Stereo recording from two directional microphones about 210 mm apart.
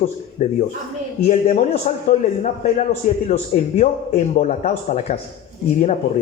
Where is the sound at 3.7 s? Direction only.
30° left (ahead or behind).